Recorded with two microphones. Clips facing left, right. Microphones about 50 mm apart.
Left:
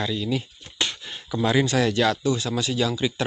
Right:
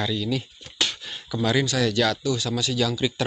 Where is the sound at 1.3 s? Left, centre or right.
Centre.